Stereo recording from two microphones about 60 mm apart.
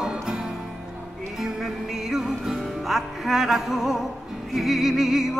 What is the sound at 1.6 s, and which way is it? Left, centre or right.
Music, centre.